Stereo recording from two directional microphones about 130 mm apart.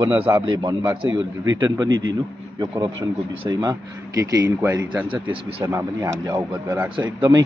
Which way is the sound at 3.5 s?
30° right (ahead or behind).